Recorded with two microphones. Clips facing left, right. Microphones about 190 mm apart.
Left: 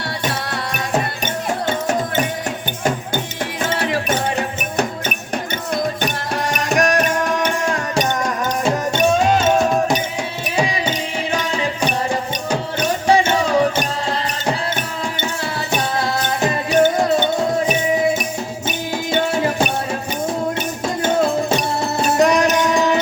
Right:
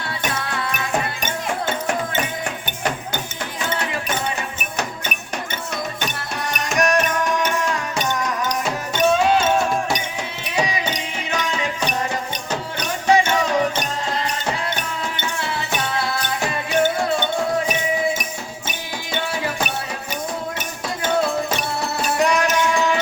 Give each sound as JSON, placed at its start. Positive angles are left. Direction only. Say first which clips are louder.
{"t": 3.8, "sound": "music", "louder": "left 5 dB", "side_deg": 65}
{"t": 6.5, "sound": "music", "louder": "left 2 dB", "side_deg": 50}
{"t": 11.3, "sound": "music", "louder": "left 1 dB", "side_deg": 30}
{"t": 13.1, "sound": "music", "louder": "left 1 dB", "side_deg": 30}
{"t": 15.8, "sound": "music", "louder": "left 5 dB", "side_deg": 40}
{"t": 19.1, "sound": "music", "louder": "left 6 dB", "side_deg": 45}
{"t": 21.5, "sound": "music", "louder": "left 5 dB", "side_deg": 40}